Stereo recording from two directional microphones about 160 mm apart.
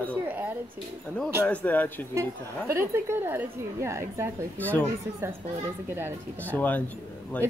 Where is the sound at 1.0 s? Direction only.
5° left (ahead or behind).